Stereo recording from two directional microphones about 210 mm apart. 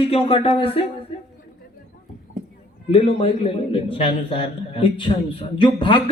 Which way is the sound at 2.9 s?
25° left (ahead or behind).